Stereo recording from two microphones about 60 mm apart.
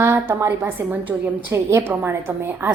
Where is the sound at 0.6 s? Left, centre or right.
Right.